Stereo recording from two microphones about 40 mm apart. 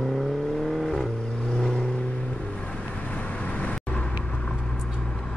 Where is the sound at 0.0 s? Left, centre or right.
Centre.